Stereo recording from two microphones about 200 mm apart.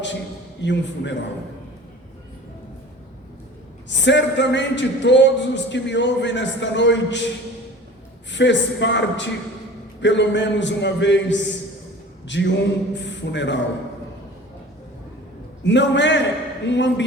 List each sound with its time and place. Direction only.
0.6 s speech: 60° left (ahead or behind)
3.8 s speech: 60° left (ahead or behind)
8.3 s speech: 65° left (ahead or behind)
15.6 s speech: 60° left (ahead or behind)